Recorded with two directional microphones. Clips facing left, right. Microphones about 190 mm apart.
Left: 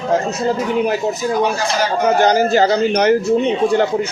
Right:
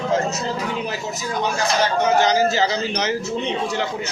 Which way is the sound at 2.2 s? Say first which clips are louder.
Left 7 dB; 55° left (ahead or behind).